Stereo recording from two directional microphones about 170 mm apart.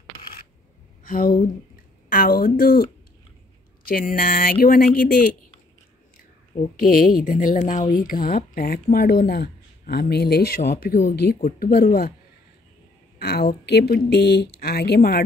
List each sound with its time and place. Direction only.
1.0 s speech: 55° left (ahead or behind)
6.8 s speech: 55° left (ahead or behind)
11.1 s speech: 65° left (ahead or behind)
13.2 s speech: 70° left (ahead or behind)